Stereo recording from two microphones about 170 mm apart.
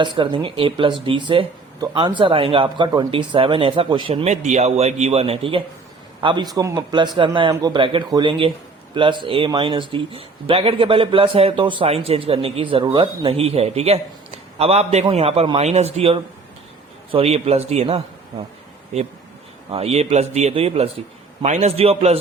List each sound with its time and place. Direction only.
0.0 s a man's voice: 30° right (ahead or behind)
19.7 s speech: 40° right (ahead or behind)